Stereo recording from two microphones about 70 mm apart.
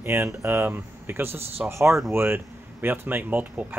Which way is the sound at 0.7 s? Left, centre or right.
Right.